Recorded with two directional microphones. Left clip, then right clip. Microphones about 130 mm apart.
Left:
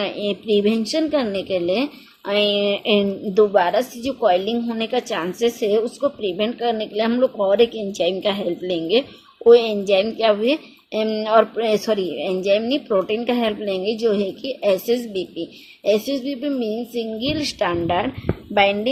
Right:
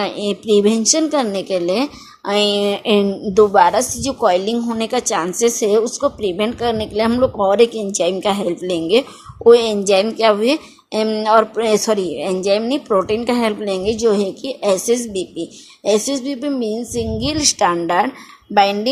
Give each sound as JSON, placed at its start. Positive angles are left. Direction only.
{"t": 0.0, "sound": "a woman's voice", "side_deg": -35}